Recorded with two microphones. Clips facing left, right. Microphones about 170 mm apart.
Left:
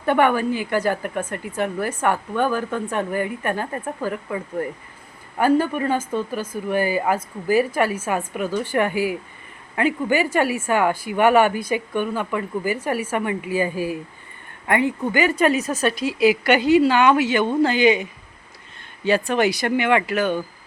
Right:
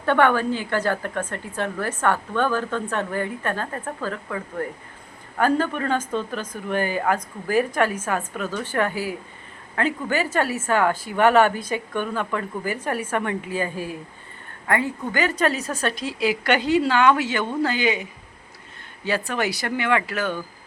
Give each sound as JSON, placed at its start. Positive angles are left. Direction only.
{"t": 0.0, "sound": "a woman's voice", "side_deg": 15}
{"t": 19.0, "sound": "speech", "side_deg": 20}